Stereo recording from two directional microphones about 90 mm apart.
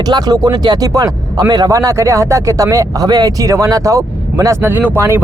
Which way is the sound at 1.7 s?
35° right (ahead or behind).